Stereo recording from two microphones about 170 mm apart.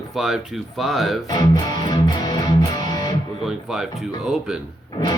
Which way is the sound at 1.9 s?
25° left (ahead or behind).